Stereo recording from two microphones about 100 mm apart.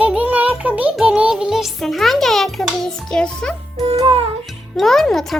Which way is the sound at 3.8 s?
80° right.